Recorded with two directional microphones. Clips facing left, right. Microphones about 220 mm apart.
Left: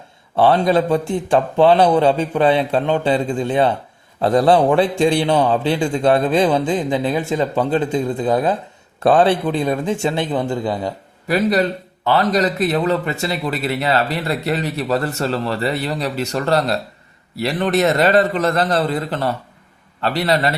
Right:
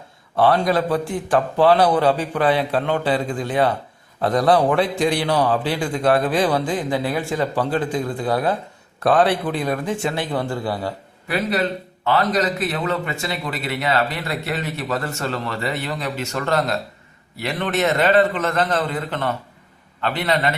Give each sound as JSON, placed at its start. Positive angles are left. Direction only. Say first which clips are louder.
{"t": 0.3, "sound": "a man's voice", "louder": "left 3 dB", "side_deg": 25}
{"t": 12.0, "sound": "a man's voice", "louder": "left 3 dB", "side_deg": 35}